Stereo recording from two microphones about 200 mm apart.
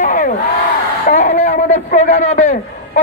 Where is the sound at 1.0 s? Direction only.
35° left (ahead or behind).